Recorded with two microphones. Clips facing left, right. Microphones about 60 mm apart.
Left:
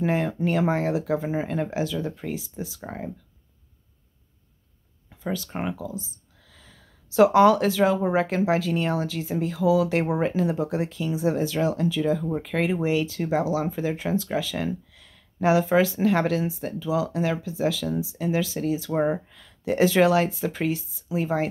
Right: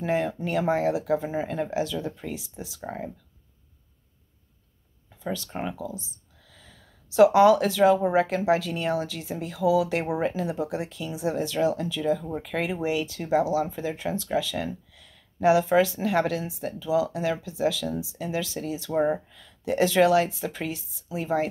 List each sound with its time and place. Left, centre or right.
0.0 s speech: centre
5.2 s speech: centre
5.5 s speech: centre
5.8 s speech: centre
18.9 s speech: centre
19.1 s speech: centre